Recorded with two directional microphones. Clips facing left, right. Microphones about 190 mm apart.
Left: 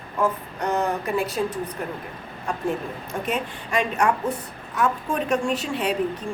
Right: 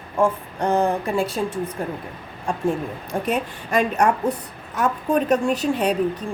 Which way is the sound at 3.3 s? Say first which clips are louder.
Right 3 dB; 40° right (ahead or behind).